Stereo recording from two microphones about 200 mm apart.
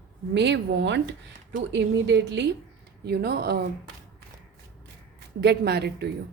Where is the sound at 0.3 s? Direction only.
60° right (ahead or behind).